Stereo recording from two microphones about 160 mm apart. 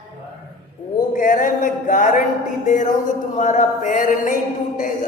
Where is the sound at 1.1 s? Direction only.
55° left (ahead or behind).